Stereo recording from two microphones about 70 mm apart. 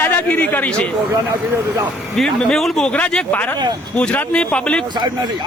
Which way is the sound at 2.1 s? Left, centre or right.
Centre.